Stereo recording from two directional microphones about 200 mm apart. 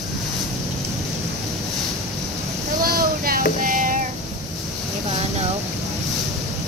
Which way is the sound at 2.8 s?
45° right (ahead or behind).